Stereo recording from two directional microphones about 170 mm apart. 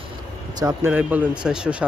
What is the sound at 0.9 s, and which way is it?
Speech, 10° right (ahead or behind).